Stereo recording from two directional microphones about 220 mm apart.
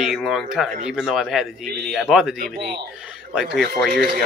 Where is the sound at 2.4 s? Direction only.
40° right (ahead or behind).